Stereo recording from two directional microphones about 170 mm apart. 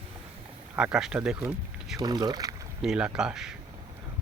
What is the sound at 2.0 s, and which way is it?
Speech, 25° right (ahead or behind).